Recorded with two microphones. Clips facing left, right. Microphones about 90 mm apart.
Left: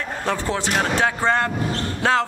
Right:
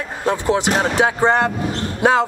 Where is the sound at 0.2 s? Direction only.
15° right (ahead or behind).